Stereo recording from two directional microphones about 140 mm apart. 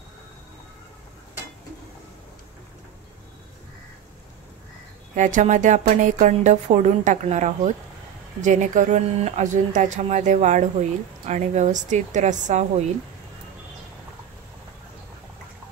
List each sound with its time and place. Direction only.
5.1 s speech: 65° right (ahead or behind)